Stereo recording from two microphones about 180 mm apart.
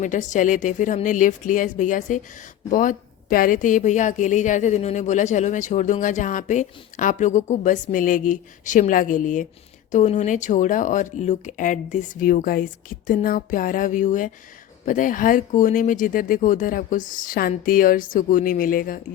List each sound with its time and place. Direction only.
0.0 s a woman's voice: 45° left (ahead or behind)